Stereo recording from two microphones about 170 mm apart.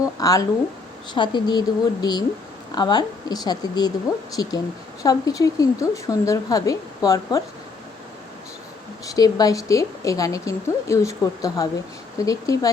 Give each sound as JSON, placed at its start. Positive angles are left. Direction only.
{"t": 0.2, "sound": "a woman's voice", "side_deg": 20}
{"t": 9.0, "sound": "a woman's voice", "side_deg": 20}